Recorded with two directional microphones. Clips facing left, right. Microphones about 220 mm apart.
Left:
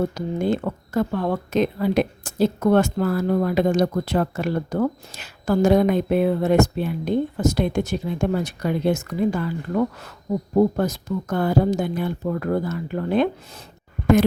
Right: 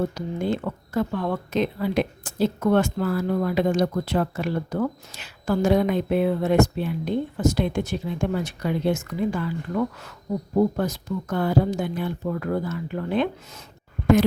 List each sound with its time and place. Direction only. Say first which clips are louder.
0.1 s speech: left 3 dB; 45° left (ahead or behind)